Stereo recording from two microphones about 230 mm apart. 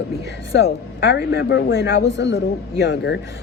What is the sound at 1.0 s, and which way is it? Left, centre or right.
Speech, left.